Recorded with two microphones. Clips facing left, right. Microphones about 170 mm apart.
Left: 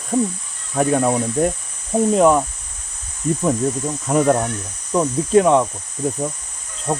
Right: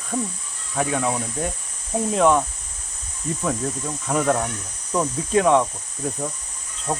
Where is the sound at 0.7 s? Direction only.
40° left (ahead or behind).